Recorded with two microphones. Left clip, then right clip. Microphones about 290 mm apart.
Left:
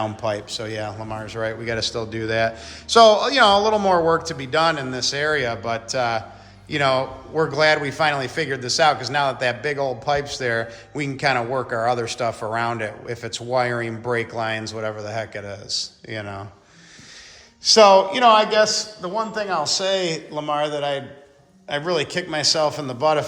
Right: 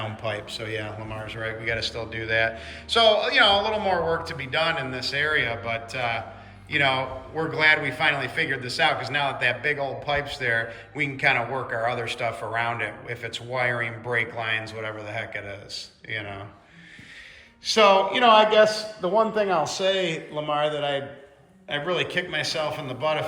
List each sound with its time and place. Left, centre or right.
0.3 s a man's voice: centre
16.0 s speech: left
17.7 s a man's voice: centre